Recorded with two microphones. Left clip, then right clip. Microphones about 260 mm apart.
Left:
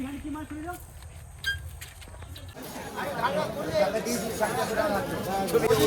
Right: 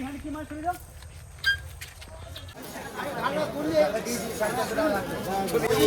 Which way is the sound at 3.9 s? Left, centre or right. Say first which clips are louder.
Even; left.